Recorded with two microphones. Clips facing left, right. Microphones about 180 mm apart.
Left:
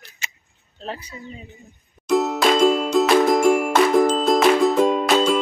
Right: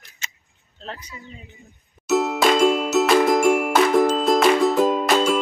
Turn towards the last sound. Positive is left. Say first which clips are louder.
# left 1 dB
turn(degrees=0)  # may be behind; listen again after turning